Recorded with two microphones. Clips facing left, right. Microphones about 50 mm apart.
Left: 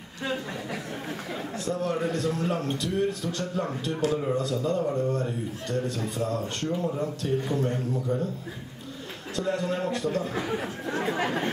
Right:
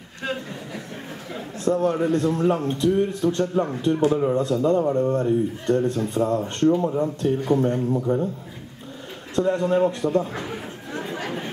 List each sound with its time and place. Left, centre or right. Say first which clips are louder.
1.6 s a man's voice: right 8 dB; right
4.1 s speech: right 6 dB; centre
4.4 s a man's voice: right 7 dB; right
9.3 s a man's voice: right 8 dB; right